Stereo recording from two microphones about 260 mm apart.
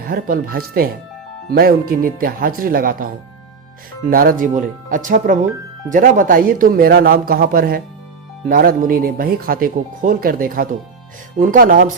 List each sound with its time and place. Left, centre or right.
0.0 s speech: right
4.1 s speech: right